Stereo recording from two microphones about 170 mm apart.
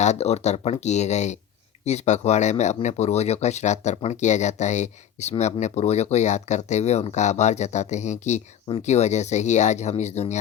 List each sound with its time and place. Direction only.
0.0 s speech: 40° left (ahead or behind)